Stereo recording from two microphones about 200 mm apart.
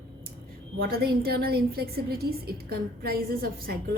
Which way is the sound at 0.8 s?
50° right (ahead or behind).